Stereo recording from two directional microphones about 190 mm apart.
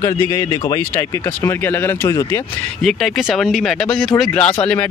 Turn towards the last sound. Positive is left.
turn(degrees=5)  # may be behind; listen again after turning